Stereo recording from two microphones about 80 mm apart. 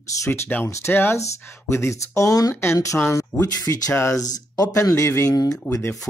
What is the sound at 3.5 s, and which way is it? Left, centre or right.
Speech, left.